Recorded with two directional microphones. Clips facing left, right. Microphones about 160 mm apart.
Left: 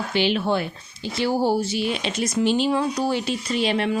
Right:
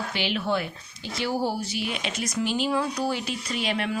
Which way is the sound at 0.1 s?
30° left (ahead or behind).